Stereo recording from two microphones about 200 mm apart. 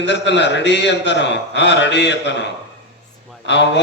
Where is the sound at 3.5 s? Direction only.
60° left (ahead or behind).